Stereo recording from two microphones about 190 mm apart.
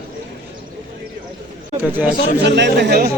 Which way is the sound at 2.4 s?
65° right (ahead or behind).